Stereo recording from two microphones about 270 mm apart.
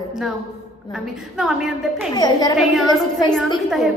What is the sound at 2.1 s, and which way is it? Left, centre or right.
A woman's voice, centre.